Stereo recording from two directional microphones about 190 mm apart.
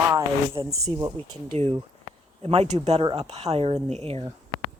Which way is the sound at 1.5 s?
30° right (ahead or behind).